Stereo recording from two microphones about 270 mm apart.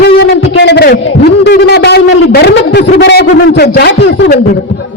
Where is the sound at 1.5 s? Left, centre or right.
Left.